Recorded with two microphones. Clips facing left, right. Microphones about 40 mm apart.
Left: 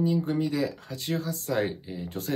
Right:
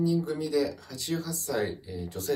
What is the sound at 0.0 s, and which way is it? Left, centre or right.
Speech, left.